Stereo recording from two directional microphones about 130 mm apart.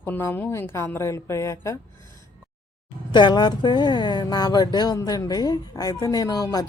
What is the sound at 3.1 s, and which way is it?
A woman's voice, 35° left (ahead or behind).